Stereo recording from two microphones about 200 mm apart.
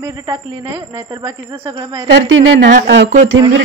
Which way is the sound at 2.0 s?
65° right (ahead or behind).